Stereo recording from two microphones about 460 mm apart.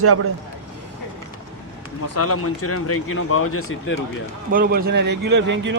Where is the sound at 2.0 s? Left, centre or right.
Left.